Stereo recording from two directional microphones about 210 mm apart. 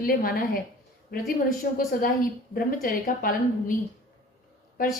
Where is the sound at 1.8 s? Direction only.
45° left (ahead or behind).